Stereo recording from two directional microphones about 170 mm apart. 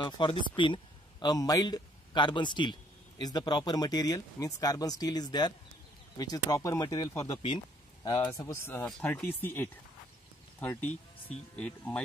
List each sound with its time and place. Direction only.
0.0 s a man's voice: 30° left (ahead or behind); by 9.3 s 10° left (ahead or behind)
10.6 s speech: 10° left (ahead or behind)